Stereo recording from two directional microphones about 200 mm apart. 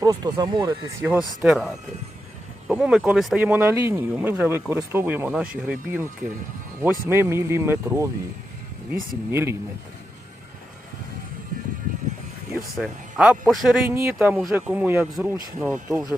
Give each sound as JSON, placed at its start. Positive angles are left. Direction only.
{"t": 0.0, "sound": "speech", "side_deg": -20}
{"t": 1.0, "sound": "speech", "side_deg": -5}
{"t": 12.7, "sound": "speech", "side_deg": -5}
{"t": 13.9, "sound": "speech", "side_deg": -15}